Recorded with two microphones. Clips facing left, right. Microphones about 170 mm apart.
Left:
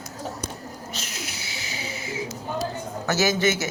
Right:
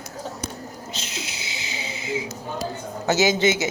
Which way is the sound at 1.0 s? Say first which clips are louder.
Right 2 dB; 25° right (ahead or behind).